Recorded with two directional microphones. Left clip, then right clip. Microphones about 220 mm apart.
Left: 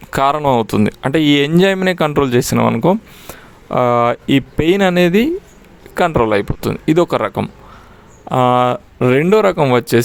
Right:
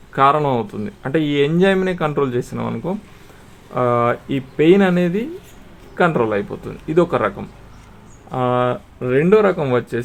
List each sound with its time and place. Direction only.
0.1 s speech: 55° left (ahead or behind)